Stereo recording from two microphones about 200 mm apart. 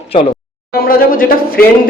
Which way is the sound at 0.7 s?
50° left (ahead or behind).